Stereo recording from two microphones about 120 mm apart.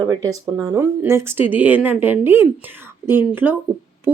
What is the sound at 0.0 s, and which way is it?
A woman's voice, 30° right (ahead or behind).